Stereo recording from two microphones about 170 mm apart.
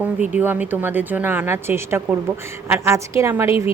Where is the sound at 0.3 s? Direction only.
10° right (ahead or behind).